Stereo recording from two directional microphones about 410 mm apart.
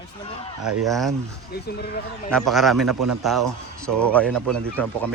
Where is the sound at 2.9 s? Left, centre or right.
Right.